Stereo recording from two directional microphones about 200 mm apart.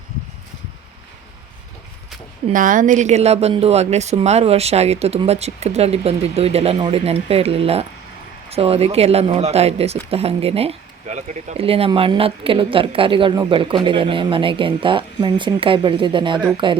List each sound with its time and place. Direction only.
2.5 s a woman's voice: 40° right (ahead or behind); by 16.7 s 25° right (ahead or behind)